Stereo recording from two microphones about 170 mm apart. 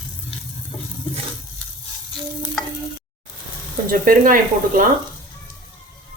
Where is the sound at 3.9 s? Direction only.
55° right (ahead or behind).